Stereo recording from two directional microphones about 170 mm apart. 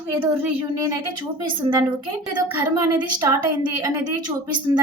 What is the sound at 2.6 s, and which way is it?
A woman's voice, 20° right (ahead or behind).